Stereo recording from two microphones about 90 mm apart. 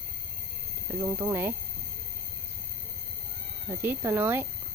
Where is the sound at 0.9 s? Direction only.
25° right (ahead or behind).